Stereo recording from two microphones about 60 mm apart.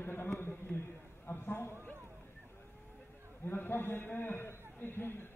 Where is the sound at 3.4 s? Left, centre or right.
Left.